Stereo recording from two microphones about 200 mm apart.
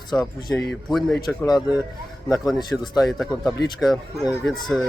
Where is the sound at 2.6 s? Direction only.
20° left (ahead or behind).